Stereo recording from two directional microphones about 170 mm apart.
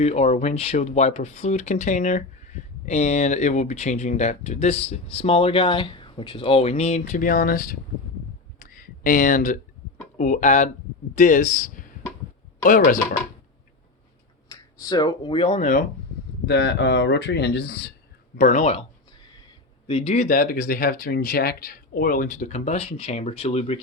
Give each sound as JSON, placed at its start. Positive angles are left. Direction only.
{"t": 0.0, "sound": "speech", "side_deg": 40}
{"t": 8.5, "sound": "a sound", "side_deg": 55}
{"t": 10.2, "sound": "a man's voice", "side_deg": 45}
{"t": 14.5, "sound": "speech", "side_deg": 20}
{"t": 16.5, "sound": "speech", "side_deg": 85}
{"t": 18.3, "sound": "speech", "side_deg": 50}
{"t": 19.9, "sound": "speech", "side_deg": 35}
{"t": 20.2, "sound": "speech", "side_deg": 55}